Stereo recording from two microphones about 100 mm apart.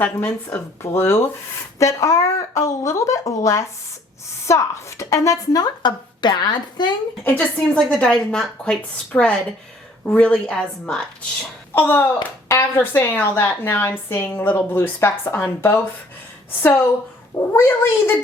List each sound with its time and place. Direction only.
0.0 s a woman's voice: 20° left (ahead or behind); by 6.9 s 45° left (ahead or behind)
7.3 s a woman's voice: 15° left (ahead or behind)
11.7 s a woman's voice: 20° left (ahead or behind)
17.5 s a woman's voice: 25° left (ahead or behind)